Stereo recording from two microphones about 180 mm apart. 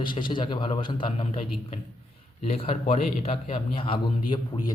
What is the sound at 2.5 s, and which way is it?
A man's voice, 35° left (ahead or behind).